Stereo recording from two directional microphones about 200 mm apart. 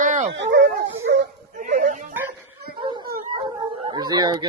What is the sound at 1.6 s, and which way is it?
Dog, 40° right (ahead or behind).